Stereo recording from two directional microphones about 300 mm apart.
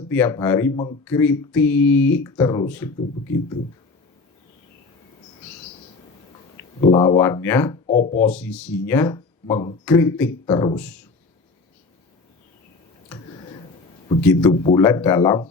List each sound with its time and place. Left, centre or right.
0.1 s speech: centre
6.9 s speech: centre
7.9 s speech: left
8.3 s speech: centre
14.2 s speech: centre
14.5 s speech: centre